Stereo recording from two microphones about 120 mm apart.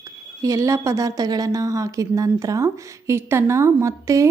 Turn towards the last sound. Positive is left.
turn(degrees=-25)  # may be behind; listen again after turning